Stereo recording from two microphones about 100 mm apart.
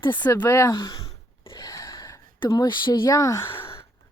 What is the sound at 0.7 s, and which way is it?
Speech, 40° left (ahead or behind).